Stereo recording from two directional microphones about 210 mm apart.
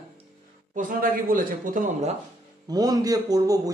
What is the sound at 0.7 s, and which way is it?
A man's voice, 40° right (ahead or behind).